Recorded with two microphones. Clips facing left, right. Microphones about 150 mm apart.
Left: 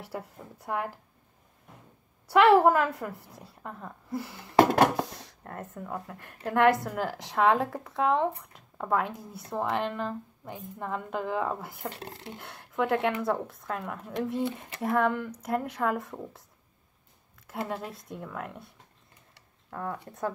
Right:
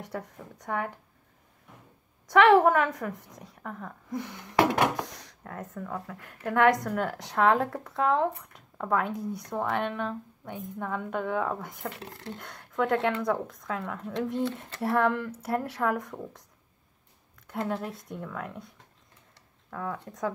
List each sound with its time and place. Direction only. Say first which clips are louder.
0.0 s speech: right 1 dB; 5° left (ahead or behind)
2.2 s a woman's voice: even; 5° left (ahead or behind)
6.5 s speech: even; 5° left (ahead or behind)
11.9 s speech: left 1 dB; 30° left (ahead or behind)
12.2 s speech: right 2 dB; 10° left (ahead or behind)
17.5 s speech: right 3 dB; 5° left (ahead or behind)
19.7 s speech: right 1 dB; 5° left (ahead or behind)